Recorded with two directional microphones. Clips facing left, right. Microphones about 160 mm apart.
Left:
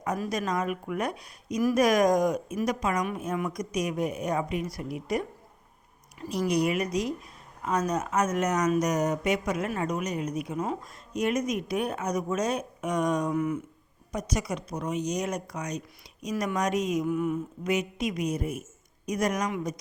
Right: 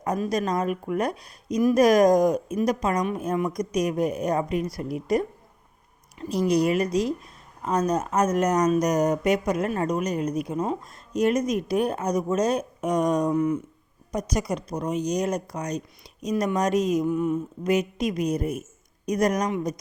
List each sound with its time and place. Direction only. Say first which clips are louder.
0.0 s speech: right 4 dB; 35° right (ahead or behind)
17.2 s a sound: right 3 dB; 20° right (ahead or behind)
17.6 s speech: right 5 dB; 35° right (ahead or behind)